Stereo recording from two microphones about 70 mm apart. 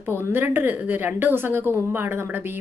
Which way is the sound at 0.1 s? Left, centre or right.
Right.